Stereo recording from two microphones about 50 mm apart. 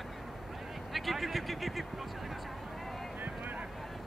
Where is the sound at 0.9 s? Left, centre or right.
Centre.